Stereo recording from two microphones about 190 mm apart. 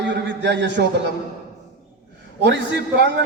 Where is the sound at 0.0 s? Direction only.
65° right (ahead or behind).